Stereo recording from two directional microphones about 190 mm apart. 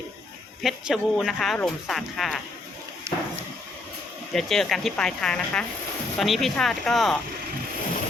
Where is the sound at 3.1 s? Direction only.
15° right (ahead or behind).